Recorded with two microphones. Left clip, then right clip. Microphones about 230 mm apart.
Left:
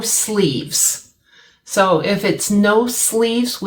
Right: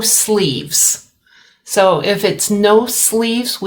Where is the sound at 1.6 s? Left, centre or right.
Right.